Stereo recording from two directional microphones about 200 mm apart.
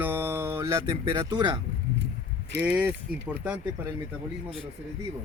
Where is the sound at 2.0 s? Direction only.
60° right (ahead or behind).